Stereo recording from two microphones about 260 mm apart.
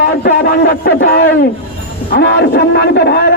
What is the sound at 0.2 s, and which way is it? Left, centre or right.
A man's voice, left.